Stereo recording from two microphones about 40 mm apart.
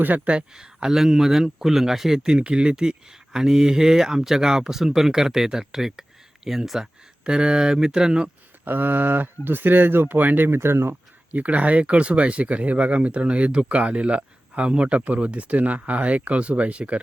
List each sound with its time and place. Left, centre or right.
0.5 s speech: centre
2.1 s speech: centre
7.3 s speech: right
8.6 s speech: right
10.2 s speech: right
10.5 s speech: right
11.3 s speech: right